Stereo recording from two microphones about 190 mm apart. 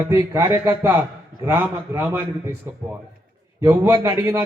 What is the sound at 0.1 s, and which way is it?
A man's voice, 15° right (ahead or behind).